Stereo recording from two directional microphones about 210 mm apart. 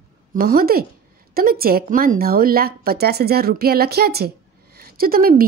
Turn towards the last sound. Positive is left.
turn(degrees=-45)  # may be behind; listen again after turning